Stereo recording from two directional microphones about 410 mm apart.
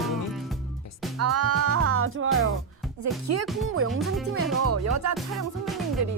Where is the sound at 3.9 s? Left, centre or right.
Centre.